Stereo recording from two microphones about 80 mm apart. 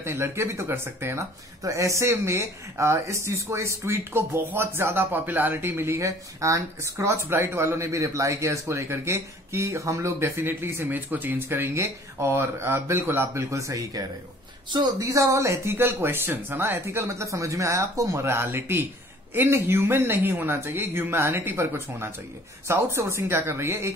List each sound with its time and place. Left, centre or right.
0.0 s speech: right
1.6 s speech: right